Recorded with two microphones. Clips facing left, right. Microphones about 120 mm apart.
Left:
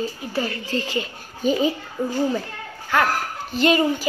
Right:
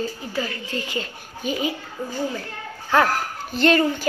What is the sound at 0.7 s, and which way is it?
Speech, 35° left (ahead or behind).